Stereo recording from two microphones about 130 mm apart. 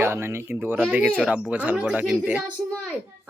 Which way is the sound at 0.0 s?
20° right (ahead or behind).